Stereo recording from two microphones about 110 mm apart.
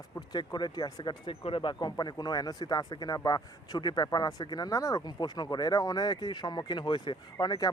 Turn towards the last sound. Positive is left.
turn(degrees=35)  # may be behind; listen again after turning